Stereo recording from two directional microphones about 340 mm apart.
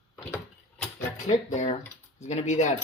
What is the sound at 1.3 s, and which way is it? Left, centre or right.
Speech, left.